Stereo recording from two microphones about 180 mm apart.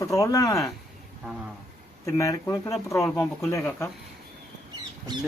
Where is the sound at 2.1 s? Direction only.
15° left (ahead or behind).